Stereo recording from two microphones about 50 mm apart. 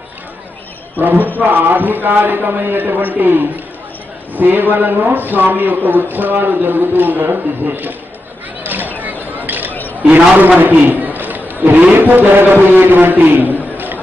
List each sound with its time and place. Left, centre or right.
0.9 s a man's voice: right
8.6 s a sound: right
10.0 s a man's voice: right